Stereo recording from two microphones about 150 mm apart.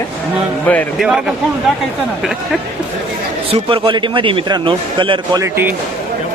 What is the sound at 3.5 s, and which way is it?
A man's voice, 35° right (ahead or behind).